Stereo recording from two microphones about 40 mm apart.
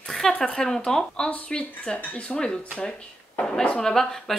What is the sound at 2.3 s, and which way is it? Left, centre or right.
Speech, left.